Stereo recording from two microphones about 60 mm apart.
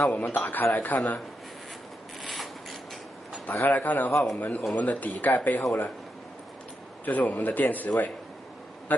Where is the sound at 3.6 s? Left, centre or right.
Left.